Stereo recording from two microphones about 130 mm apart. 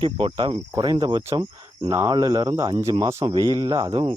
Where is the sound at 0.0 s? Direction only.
40° right (ahead or behind).